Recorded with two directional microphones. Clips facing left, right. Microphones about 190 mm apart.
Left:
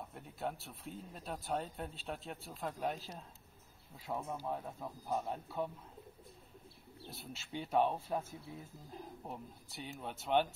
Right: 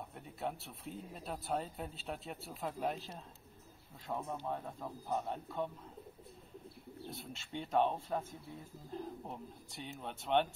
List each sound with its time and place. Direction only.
0.1 s speech: centre (ahead or behind)
7.1 s speech: centre (ahead or behind)